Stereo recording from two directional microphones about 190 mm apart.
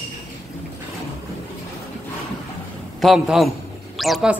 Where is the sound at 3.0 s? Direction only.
Centre (ahead or behind).